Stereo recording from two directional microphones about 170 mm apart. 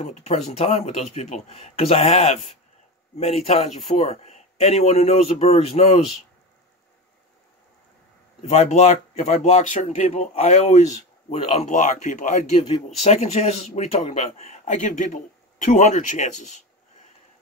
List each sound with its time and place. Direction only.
0.0 s speech: 40° left (ahead or behind)
8.4 s speech: 40° left (ahead or behind)